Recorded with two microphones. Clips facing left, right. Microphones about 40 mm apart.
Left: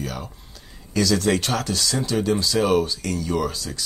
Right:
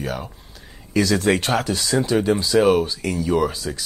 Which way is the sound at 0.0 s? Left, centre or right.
Right.